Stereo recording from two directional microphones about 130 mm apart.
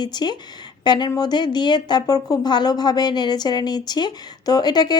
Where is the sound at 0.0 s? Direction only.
35° left (ahead or behind).